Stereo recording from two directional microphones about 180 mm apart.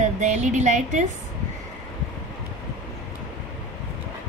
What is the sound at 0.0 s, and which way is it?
Speech, 40° right (ahead or behind).